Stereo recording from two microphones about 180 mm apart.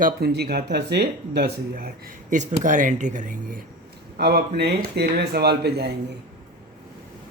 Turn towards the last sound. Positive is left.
turn(degrees=-65)  # may be behind; listen again after turning